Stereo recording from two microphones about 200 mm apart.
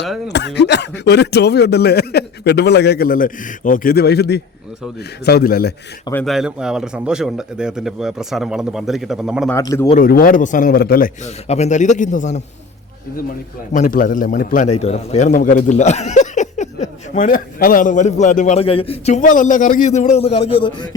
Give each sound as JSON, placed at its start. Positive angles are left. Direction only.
{"t": 0.3, "sound": "a man's voice", "side_deg": 60}
{"t": 6.2, "sound": "speech", "side_deg": -5}
{"t": 9.5, "sound": "speech", "side_deg": 15}
{"t": 10.0, "sound": "a man's voice", "side_deg": 45}
{"t": 11.4, "sound": "a man's voice", "side_deg": 35}
{"t": 13.7, "sound": "a man's voice", "side_deg": 40}